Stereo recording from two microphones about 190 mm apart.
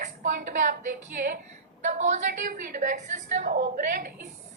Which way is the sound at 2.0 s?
40° right (ahead or behind).